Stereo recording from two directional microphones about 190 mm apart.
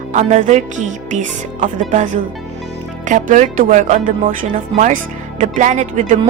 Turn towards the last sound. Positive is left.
turn(degrees=-40)  # may be behind; listen again after turning